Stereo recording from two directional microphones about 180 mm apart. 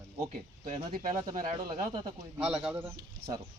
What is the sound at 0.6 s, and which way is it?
Speech, 45° right (ahead or behind).